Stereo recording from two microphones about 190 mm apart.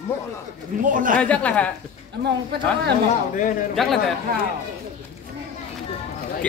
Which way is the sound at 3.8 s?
Centre (ahead or behind).